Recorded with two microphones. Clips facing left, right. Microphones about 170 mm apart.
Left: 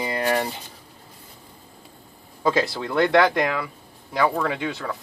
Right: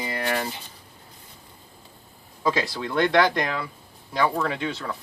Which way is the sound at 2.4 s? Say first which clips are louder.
Left 3 dB; 25° left (ahead or behind).